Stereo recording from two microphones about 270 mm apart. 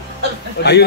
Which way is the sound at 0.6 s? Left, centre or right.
Left.